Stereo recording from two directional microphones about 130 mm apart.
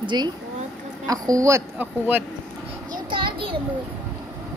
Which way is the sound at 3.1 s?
40° right (ahead or behind).